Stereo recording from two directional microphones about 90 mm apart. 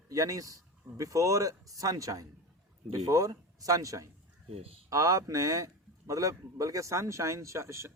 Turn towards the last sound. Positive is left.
turn(degrees=-30)  # may be behind; listen again after turning